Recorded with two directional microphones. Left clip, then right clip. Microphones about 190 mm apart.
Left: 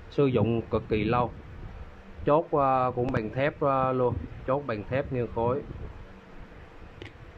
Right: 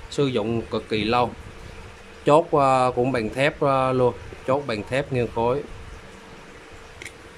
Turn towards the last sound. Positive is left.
turn(degrees=0)  # may be behind; listen again after turning